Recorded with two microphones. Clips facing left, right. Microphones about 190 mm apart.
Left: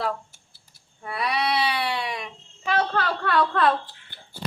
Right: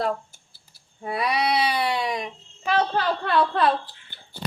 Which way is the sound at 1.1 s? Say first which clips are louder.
Right 2 dB; 45° right (ahead or behind).